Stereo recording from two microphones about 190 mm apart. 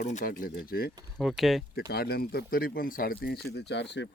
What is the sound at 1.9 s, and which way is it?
Speech, 55° left (ahead or behind).